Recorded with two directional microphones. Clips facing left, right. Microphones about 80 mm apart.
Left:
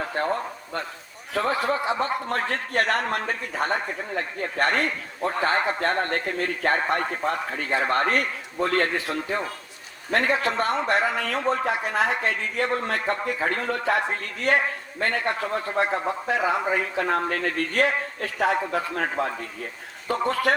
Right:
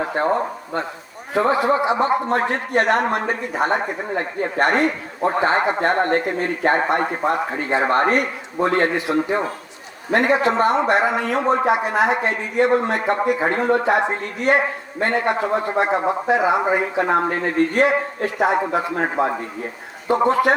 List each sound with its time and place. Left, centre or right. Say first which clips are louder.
0.0 s a man's voice: right 6 dB; right